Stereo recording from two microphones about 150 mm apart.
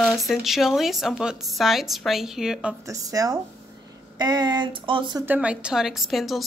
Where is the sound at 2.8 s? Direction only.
25° right (ahead or behind).